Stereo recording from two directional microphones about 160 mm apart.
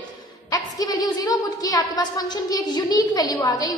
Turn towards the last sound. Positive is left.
turn(degrees=20)  # may be behind; listen again after turning